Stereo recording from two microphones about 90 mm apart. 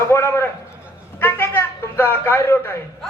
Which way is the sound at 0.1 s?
30° left (ahead or behind).